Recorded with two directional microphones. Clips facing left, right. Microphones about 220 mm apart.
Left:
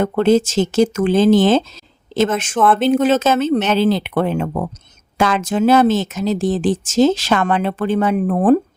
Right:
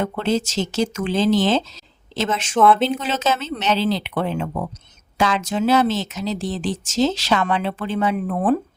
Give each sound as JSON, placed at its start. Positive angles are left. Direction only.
{"t": 0.0, "sound": "speech", "side_deg": 50}